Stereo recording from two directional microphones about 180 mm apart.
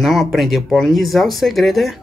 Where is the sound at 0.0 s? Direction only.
Centre (ahead or behind).